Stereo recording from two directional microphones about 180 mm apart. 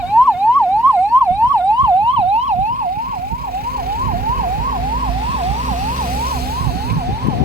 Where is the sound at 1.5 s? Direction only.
20° right (ahead or behind).